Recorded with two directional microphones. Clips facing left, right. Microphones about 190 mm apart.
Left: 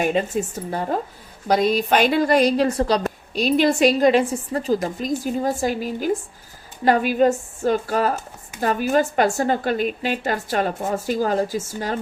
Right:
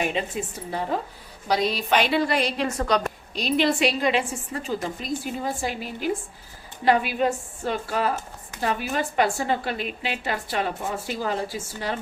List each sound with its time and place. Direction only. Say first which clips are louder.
0.0 s speech: left 6 dB; 45° left (ahead or behind)
3.3 s speech: left 4 dB; 45° left (ahead or behind)